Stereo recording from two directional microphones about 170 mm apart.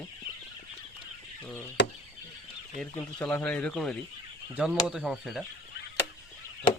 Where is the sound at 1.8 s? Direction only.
80° left.